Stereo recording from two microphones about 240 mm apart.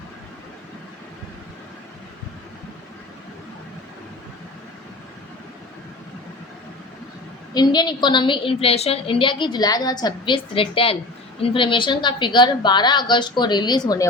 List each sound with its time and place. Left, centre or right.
7.5 s a woman's voice: centre